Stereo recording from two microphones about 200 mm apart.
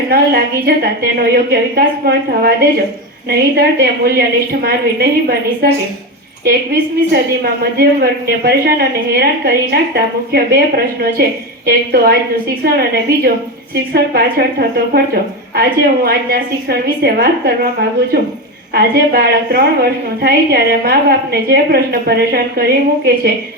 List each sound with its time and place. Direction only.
0.1 s a woman's voice: 50° right (ahead or behind)
7.1 s a woman's voice: 50° right (ahead or behind)
18.7 s a woman's voice: 50° right (ahead or behind)